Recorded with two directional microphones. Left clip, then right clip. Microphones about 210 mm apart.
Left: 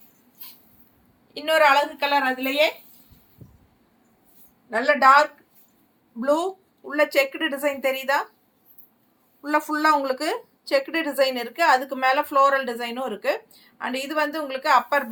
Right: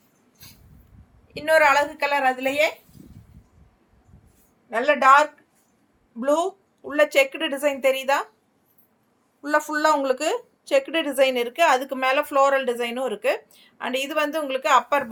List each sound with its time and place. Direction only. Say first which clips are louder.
1.3 s a woman's voice: even; 25° right (ahead or behind)
4.7 s a woman's voice: even; 20° right (ahead or behind)
9.4 s a woman's voice: right 1 dB; 30° right (ahead or behind)
13.9 s a woman's voice: right 1 dB; centre (ahead or behind)
14.4 s a woman's voice: even; 35° right (ahead or behind)